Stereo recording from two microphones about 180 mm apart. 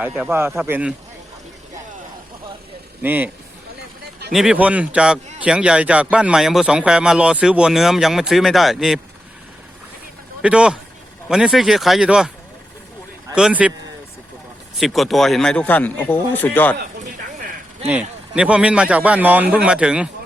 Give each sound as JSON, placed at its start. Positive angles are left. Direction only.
{"t": 0.0, "sound": "speech", "side_deg": -10}
{"t": 3.0, "sound": "speech", "side_deg": -10}
{"t": 10.4, "sound": "speech", "side_deg": -5}
{"t": 13.3, "sound": "speech", "side_deg": -5}
{"t": 14.8, "sound": "speech", "side_deg": 0}
{"t": 17.8, "sound": "speech", "side_deg": -10}